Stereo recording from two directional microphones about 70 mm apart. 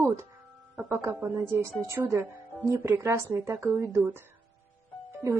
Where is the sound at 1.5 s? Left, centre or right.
Right.